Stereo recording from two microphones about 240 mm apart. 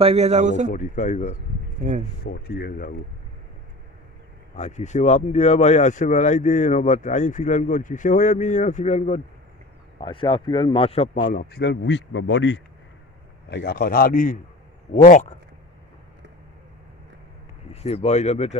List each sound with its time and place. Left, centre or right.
0.0 s a man's voice: right
0.7 s speech: left
1.8 s speech: right
2.2 s speech: left
4.6 s speech: left
11.3 s speech: left
17.8 s speech: left